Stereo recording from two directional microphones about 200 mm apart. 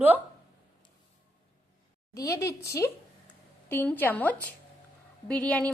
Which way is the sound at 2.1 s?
15° left (ahead or behind).